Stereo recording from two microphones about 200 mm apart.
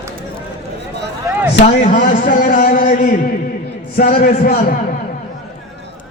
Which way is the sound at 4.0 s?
45° left (ahead or behind).